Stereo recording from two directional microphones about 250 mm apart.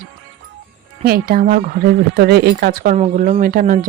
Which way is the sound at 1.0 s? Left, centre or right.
Right.